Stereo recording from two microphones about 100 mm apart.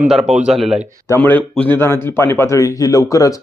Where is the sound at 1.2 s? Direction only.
15° left (ahead or behind).